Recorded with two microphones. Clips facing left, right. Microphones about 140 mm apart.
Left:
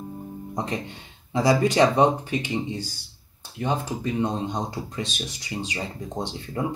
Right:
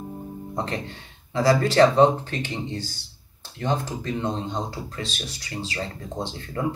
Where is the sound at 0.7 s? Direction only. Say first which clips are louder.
Even; 20° left (ahead or behind).